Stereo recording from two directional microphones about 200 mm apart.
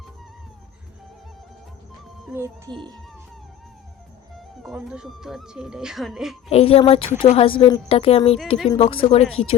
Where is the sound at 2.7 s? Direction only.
25° right (ahead or behind).